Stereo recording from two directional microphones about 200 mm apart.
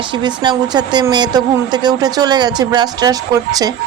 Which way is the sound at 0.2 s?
20° right (ahead or behind).